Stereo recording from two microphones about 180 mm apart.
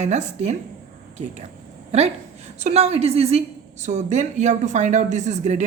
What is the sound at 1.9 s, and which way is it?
A woman's voice, 35° right (ahead or behind).